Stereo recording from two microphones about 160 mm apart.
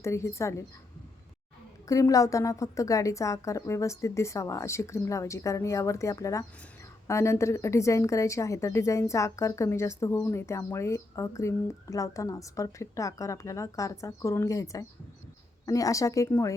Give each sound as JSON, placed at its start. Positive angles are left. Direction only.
{"t": 0.0, "sound": "a woman's voice", "side_deg": 15}
{"t": 1.9, "sound": "speech", "side_deg": 20}